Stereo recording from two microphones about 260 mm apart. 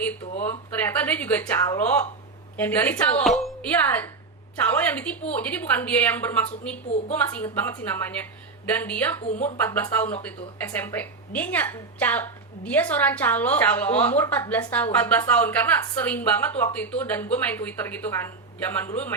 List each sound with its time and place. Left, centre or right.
0.9 s a woman's voice: centre
9.2 s speech: left
9.6 s a woman's voice: centre